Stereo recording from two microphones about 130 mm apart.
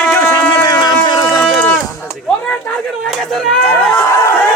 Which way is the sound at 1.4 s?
10° left (ahead or behind).